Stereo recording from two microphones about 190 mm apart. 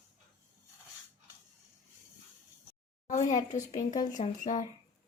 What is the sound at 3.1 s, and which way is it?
Speech, 40° left (ahead or behind).